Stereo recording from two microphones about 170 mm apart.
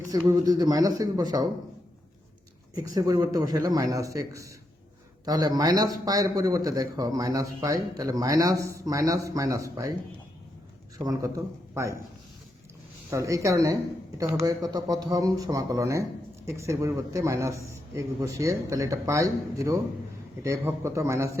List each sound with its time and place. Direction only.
0.1 s a man's voice: 20° right (ahead or behind)
2.7 s a man's voice: 20° right (ahead or behind)
10.9 s a man's voice: 20° right (ahead or behind)
13.1 s a man's voice: 20° right (ahead or behind)